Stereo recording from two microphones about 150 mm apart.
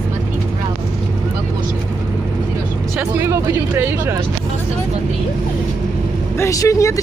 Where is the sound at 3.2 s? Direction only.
15° right (ahead or behind).